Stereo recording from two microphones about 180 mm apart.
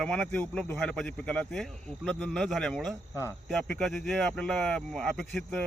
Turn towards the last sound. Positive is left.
turn(degrees=5)  # may be behind; listen again after turning